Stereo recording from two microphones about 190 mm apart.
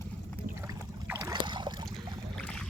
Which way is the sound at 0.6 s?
15° right (ahead or behind).